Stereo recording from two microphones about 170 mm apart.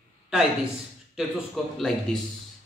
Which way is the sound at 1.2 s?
5° right (ahead or behind).